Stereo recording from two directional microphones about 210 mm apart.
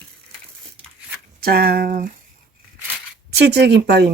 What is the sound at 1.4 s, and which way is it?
Speech, 45° right (ahead or behind).